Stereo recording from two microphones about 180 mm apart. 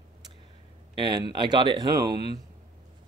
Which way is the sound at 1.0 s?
25° right (ahead or behind).